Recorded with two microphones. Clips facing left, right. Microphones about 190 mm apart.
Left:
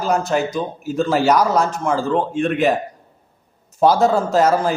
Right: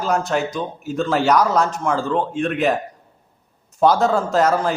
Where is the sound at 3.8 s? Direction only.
5° left (ahead or behind).